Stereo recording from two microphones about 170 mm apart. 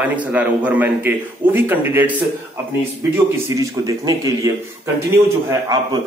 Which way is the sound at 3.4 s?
20° right (ahead or behind).